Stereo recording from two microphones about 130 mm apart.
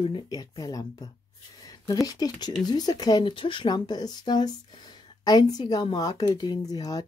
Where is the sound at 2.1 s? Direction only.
30° left (ahead or behind).